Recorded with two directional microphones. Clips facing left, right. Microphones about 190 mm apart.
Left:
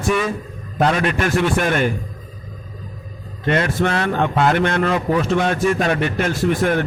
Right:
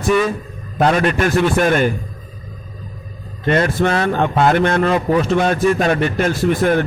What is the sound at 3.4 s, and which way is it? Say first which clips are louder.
A man's voice: right 3 dB; 40° right (ahead or behind).